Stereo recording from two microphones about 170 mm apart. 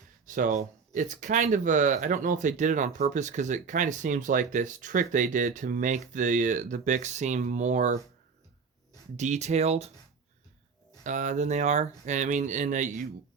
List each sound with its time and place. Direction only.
0.3 s speech: 50° right (ahead or behind)
9.1 s speech: 45° right (ahead or behind)
11.0 s speech: 45° right (ahead or behind)